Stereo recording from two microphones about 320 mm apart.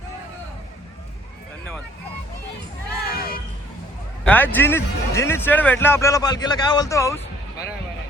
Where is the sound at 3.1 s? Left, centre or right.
Left.